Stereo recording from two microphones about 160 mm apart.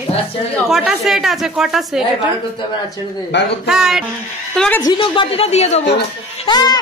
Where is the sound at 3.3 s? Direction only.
90° left.